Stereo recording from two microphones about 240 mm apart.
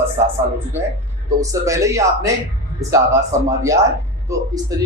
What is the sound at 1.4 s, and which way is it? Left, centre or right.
Speech, centre.